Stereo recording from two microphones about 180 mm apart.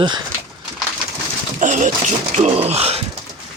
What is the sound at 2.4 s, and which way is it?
Speech, 35° right (ahead or behind).